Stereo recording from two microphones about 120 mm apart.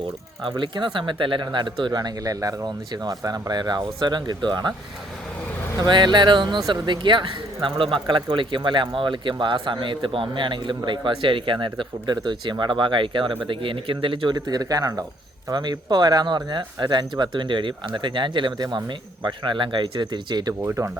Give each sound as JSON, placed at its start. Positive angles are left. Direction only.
{"t": 0.4, "sound": "speech", "side_deg": -40}
{"t": 5.8, "sound": "speech", "side_deg": -40}
{"t": 20.5, "sound": "speech", "side_deg": -20}